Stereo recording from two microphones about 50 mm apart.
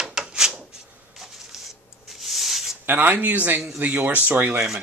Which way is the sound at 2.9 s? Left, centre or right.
Right.